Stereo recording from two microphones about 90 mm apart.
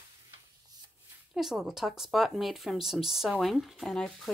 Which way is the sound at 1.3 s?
5° right (ahead or behind).